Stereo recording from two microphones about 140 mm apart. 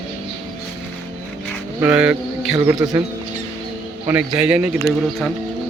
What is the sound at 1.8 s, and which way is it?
Speech, 5° right (ahead or behind).